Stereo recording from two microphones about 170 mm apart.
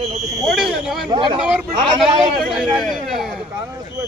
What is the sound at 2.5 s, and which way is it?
Speech, centre (ahead or behind).